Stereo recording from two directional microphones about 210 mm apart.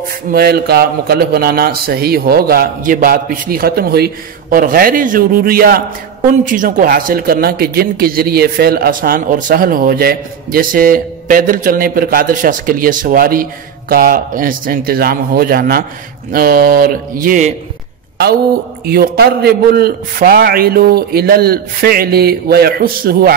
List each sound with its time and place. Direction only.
0.3 s speech: 50° right (ahead or behind)
18.9 s speech: 45° right (ahead or behind)